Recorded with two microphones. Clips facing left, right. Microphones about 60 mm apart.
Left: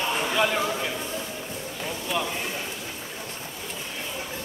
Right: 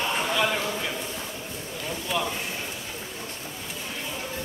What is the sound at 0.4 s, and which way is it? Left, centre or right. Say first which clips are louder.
Speech: left 4 dB; centre.